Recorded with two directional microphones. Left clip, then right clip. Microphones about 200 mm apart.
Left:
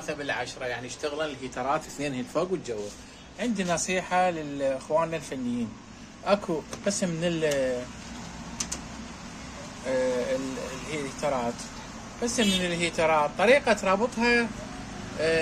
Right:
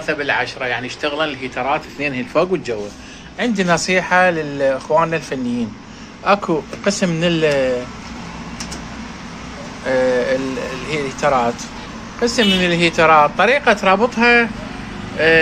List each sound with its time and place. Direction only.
0.0 s a man's voice: 5° left (ahead or behind)
1.5 s speech: 30° left (ahead or behind)
3.3 s speech: centre (ahead or behind)
9.8 s vehicle: 5° left (ahead or behind)
10.9 s speech: centre (ahead or behind)